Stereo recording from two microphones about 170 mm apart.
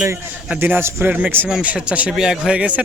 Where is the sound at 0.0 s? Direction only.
10° right (ahead or behind).